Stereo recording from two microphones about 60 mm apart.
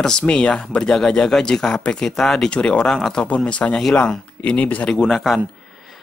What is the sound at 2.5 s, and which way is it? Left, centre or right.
Speech, centre.